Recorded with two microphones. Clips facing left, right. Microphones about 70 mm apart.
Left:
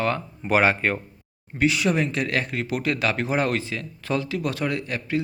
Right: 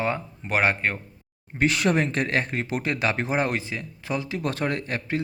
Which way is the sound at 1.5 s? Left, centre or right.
Right.